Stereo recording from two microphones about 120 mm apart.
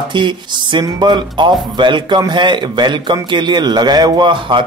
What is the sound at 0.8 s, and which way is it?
A man's voice, 35° right (ahead or behind).